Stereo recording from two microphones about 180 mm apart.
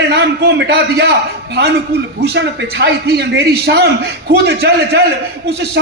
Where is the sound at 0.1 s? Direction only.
65° right (ahead or behind).